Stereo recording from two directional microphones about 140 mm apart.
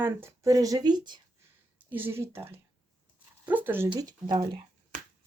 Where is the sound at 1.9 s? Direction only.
15° right (ahead or behind).